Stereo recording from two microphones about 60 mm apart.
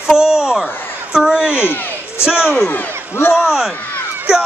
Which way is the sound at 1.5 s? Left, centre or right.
Left.